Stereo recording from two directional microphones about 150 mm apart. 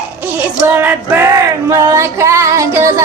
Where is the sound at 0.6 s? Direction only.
15° right (ahead or behind).